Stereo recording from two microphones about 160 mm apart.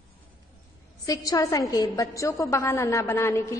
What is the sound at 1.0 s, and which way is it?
A woman's voice, 20° left (ahead or behind).